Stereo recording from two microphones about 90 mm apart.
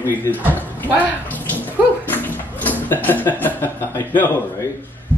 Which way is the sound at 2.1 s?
20° left (ahead or behind).